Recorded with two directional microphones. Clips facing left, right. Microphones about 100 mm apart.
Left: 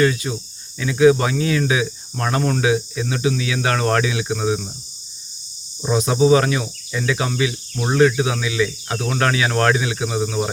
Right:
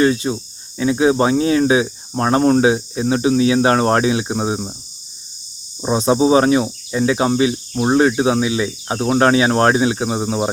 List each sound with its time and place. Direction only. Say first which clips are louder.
0.0 s speech: right 3 dB; 30° right (ahead or behind)
5.8 s speech: right 2 dB; 30° right (ahead or behind)